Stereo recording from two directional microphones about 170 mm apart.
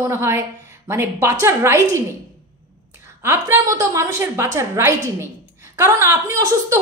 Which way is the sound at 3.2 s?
15° right (ahead or behind).